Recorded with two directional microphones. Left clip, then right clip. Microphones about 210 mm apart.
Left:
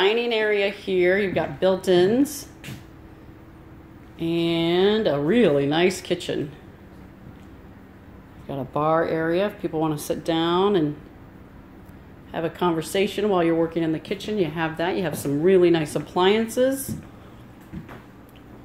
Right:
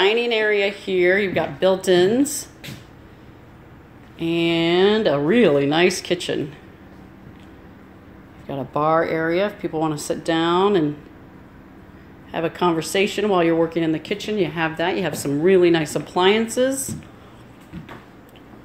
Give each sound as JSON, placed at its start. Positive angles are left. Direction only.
{"t": 0.0, "sound": "speech", "side_deg": 0}
{"t": 4.2, "sound": "speech", "side_deg": -5}
{"t": 8.5, "sound": "speech", "side_deg": 0}
{"t": 12.3, "sound": "speech", "side_deg": -5}